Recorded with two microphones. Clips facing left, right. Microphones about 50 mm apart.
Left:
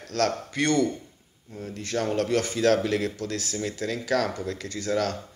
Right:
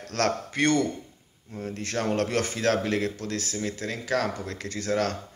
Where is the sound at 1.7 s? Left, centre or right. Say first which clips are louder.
Even; right.